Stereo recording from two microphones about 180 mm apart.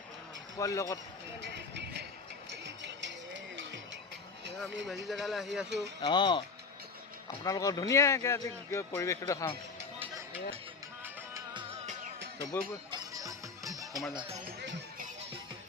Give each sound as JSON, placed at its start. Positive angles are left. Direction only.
{"t": 0.5, "sound": "speech", "side_deg": 15}
{"t": 1.5, "sound": "vehicle", "side_deg": -70}
{"t": 2.5, "sound": "music", "side_deg": -75}
{"t": 5.0, "sound": "speech", "side_deg": 0}
{"t": 6.0, "sound": "speech", "side_deg": 25}
{"t": 7.4, "sound": "speech", "side_deg": 20}
{"t": 12.9, "sound": "music", "side_deg": -20}